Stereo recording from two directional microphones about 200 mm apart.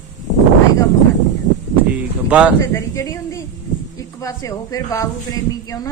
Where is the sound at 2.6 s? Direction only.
15° left (ahead or behind).